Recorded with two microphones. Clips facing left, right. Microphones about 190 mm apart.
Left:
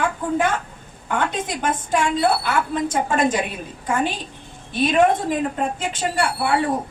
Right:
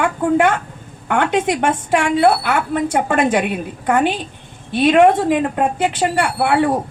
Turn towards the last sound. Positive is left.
turn(degrees=-70)  # may be behind; listen again after turning